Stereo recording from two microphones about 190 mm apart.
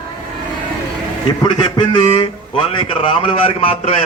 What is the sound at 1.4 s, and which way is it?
A man's voice, 25° left (ahead or behind).